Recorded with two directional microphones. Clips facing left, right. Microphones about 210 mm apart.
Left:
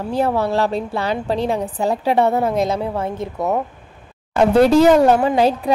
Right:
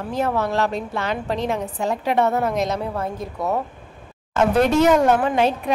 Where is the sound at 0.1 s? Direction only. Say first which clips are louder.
Left 3 dB; 30° left (ahead or behind).